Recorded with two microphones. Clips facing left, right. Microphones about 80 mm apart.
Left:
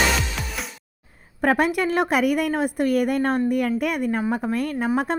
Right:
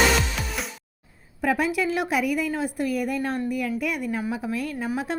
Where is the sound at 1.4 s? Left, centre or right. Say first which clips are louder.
Left 4 dB; left.